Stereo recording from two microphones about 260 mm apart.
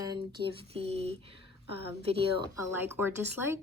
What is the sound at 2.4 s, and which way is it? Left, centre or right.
Speech, centre.